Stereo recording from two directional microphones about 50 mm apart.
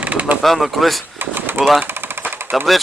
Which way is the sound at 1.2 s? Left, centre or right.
Right.